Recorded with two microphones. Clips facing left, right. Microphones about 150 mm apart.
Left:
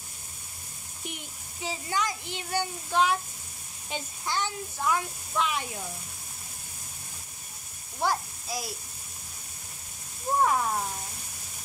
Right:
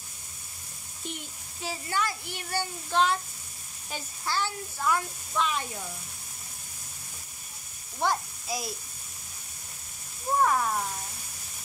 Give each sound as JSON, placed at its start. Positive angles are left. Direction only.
{"t": 1.0, "sound": "speech", "side_deg": 15}
{"t": 8.0, "sound": "speech", "side_deg": 5}
{"t": 10.4, "sound": "speech", "side_deg": 10}